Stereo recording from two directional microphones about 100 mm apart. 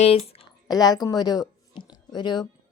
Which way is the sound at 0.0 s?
80° left.